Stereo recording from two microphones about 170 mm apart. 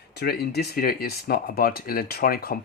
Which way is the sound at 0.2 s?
70° left (ahead or behind).